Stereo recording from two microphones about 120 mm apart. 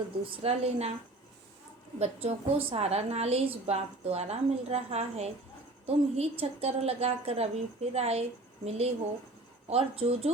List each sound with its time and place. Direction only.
0.3 s a woman's voice: 60° right (ahead or behind)
2.0 s a woman's voice: 55° right (ahead or behind)